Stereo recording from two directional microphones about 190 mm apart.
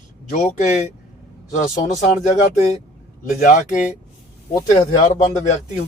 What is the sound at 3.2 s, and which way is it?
Speech, 45° left (ahead or behind).